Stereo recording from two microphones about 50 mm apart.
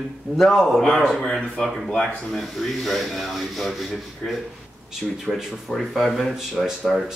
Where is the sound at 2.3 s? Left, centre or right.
Centre.